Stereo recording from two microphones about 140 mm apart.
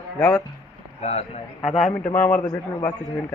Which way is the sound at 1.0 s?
50° left (ahead or behind).